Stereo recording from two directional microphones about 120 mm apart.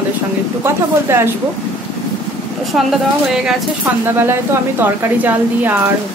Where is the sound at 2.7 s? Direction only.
5° right (ahead or behind).